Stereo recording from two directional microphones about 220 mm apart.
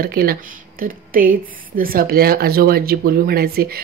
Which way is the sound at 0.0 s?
45° right (ahead or behind).